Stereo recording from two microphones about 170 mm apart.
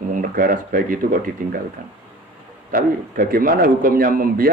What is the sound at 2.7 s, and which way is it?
A man's voice, 55° right (ahead or behind).